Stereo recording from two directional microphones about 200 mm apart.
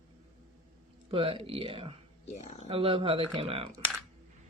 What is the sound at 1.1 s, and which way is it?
Speech, 25° right (ahead or behind).